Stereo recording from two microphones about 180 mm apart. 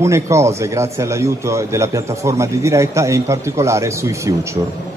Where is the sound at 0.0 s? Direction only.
15° right (ahead or behind).